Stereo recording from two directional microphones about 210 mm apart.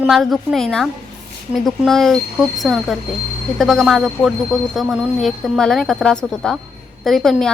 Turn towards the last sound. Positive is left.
turn(degrees=0)  # may be behind; listen again after turning